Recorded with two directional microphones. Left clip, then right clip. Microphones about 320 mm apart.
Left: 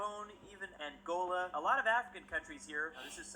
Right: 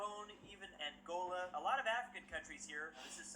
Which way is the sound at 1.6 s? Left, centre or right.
Centre.